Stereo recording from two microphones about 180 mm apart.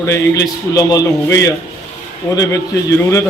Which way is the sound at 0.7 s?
20° left (ahead or behind).